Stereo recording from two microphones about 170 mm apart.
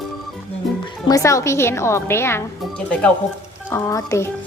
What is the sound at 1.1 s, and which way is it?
A woman's voice, 20° left (ahead or behind).